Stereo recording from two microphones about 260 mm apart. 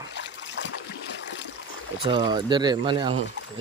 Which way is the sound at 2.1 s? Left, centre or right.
Centre.